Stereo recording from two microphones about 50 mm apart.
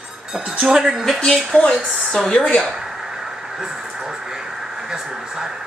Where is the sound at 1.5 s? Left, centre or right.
Centre.